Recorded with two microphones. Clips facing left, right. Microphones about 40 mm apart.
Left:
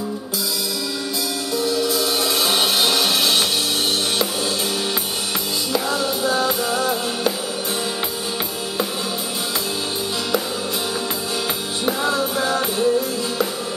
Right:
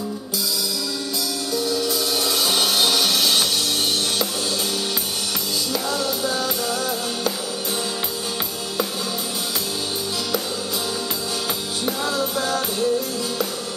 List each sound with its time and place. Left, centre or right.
1.5 s music: left
5.7 s music: left
11.8 s music: left